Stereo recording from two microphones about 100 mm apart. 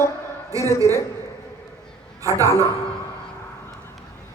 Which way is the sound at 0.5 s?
35° right (ahead or behind).